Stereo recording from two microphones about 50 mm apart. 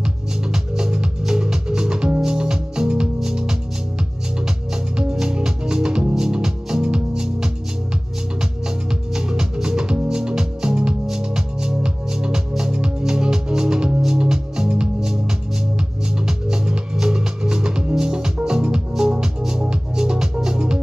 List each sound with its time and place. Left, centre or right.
0.5 s music: centre
5.1 s music: centre
16.2 s music: centre